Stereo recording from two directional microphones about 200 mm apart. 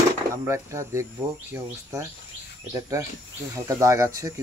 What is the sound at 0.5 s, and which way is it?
Speech, 15° right (ahead or behind).